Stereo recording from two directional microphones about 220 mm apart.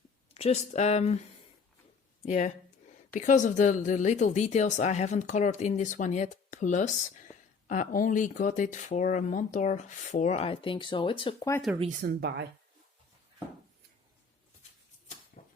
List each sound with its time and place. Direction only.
0.3 s speech: 30° left (ahead or behind)
2.2 s speech: 35° left (ahead or behind); by 11.6 s 15° left (ahead or behind)
11.9 s speech: 45° right (ahead or behind)
15.4 s a sound: 35° left (ahead or behind)